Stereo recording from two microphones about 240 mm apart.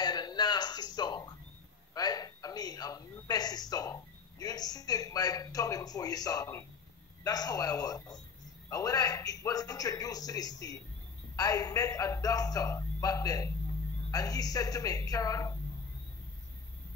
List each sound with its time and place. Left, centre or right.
0.0 s music: centre
2.0 s a sound: centre
7.2 s a man's voice: centre